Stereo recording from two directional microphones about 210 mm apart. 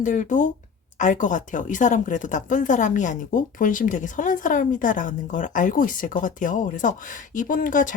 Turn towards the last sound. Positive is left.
turn(degrees=40)  # may be behind; listen again after turning